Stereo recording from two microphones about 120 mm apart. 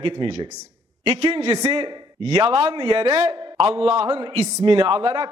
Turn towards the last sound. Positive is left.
turn(degrees=-50)  # may be behind; listen again after turning